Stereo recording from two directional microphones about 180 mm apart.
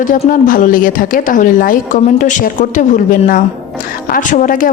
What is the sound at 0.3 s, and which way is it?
Speech, 50° left (ahead or behind).